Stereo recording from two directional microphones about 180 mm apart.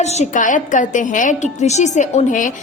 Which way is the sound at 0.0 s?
40° left (ahead or behind).